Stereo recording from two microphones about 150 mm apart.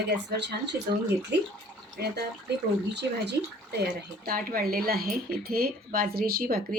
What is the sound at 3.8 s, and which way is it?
Speech, 85° right.